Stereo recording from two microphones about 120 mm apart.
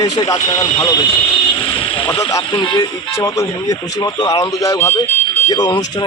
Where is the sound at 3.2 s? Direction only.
25° left (ahead or behind).